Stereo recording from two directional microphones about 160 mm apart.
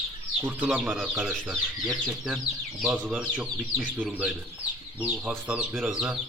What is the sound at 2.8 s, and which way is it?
Speech, centre (ahead or behind).